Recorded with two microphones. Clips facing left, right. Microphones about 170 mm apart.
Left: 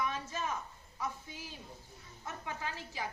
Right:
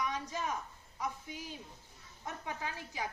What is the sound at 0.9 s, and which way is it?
Speech, 15° right (ahead or behind).